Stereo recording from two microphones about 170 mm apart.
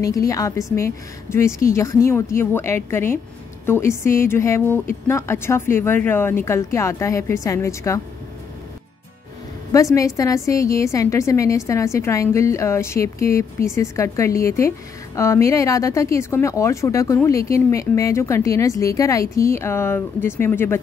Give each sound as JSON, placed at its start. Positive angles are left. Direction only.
{"t": 0.0, "sound": "a woman's voice", "side_deg": 20}
{"t": 9.9, "sound": "speech", "side_deg": 20}